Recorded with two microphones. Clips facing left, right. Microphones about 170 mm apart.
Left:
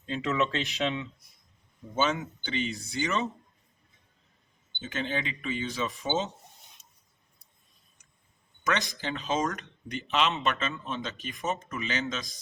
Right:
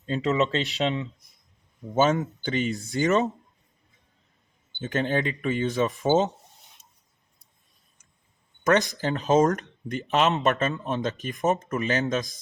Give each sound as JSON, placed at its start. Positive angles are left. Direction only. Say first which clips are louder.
{"t": 0.0, "sound": "speech", "louder": "right 5 dB", "side_deg": -40}
{"t": 4.8, "sound": "speech", "louder": "right 7 dB", "side_deg": -50}
{"t": 8.6, "sound": "speech", "louder": "right 8 dB", "side_deg": -45}